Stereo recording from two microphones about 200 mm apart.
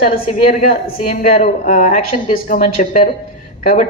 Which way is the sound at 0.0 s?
45° left (ahead or behind).